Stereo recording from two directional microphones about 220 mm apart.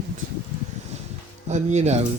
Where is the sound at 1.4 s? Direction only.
30° right (ahead or behind).